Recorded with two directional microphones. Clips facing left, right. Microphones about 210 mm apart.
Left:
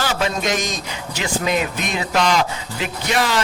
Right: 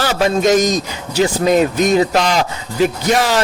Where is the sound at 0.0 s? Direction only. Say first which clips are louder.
Right 7 dB; 40° right (ahead or behind).